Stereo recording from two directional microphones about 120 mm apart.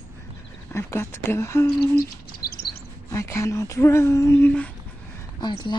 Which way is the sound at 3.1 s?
25° left (ahead or behind).